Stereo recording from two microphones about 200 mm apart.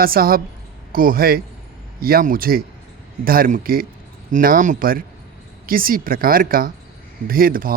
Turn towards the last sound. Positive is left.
turn(degrees=-45)  # may be behind; listen again after turning